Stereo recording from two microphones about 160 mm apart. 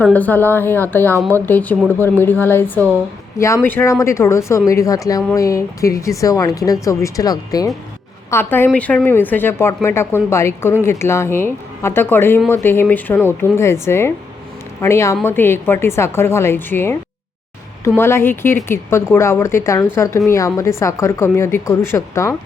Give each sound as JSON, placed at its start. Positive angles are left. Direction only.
{"t": 0.0, "sound": "speech", "side_deg": 10}